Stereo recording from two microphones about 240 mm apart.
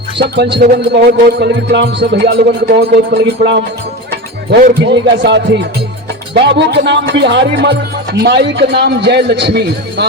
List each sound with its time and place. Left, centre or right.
0.2 s music: right